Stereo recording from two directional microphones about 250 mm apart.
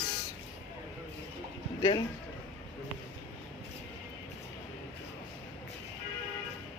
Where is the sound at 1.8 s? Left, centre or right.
Centre.